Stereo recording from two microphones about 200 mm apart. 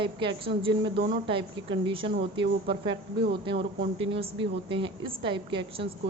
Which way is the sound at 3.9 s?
25° right (ahead or behind).